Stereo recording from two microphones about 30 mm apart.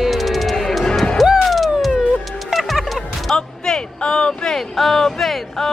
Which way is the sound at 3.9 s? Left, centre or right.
Left.